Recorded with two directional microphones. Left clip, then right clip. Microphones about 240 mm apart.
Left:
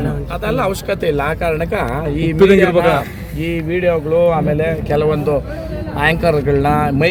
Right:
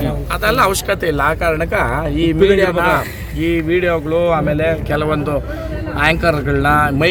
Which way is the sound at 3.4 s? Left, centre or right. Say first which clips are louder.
Right 3 dB; centre.